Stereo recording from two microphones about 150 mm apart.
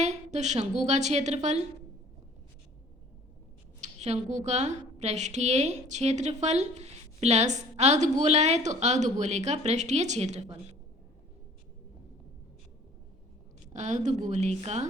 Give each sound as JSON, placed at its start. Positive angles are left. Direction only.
{"t": 0.0, "sound": "a woman's voice", "side_deg": -50}
{"t": 3.8, "sound": "a woman's voice", "side_deg": -50}
{"t": 13.7, "sound": "a woman's voice", "side_deg": -55}